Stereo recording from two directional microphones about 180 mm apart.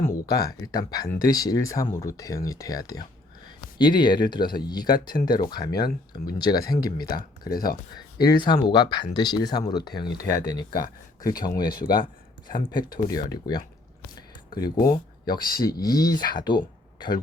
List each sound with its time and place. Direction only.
0.0 s speech: 20° left (ahead or behind)
14.2 s a sound: 20° left (ahead or behind)
14.8 s speech: 20° left (ahead or behind)